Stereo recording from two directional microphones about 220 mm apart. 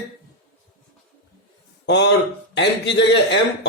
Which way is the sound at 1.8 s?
50° left (ahead or behind).